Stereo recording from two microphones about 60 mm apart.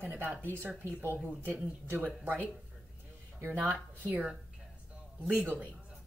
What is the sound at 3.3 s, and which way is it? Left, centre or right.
Speech, right.